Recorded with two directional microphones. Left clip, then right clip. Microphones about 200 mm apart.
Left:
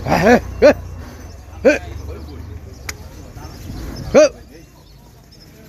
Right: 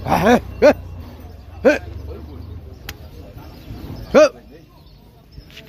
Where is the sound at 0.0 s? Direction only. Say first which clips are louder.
Left 2 dB; 5° left (ahead or behind).